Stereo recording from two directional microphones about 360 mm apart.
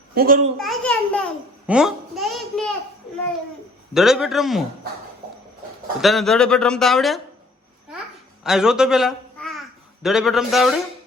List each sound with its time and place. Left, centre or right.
0.1 s a child's voice: right
0.5 s a child's voice: centre
3.9 s a child's voice: centre
6.0 s a child's voice: centre
8.4 s a child's voice: centre